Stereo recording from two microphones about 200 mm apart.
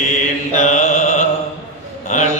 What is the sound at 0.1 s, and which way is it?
Mantra, 35° left (ahead or behind).